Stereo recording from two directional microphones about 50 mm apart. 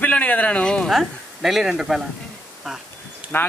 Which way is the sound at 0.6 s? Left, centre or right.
Centre.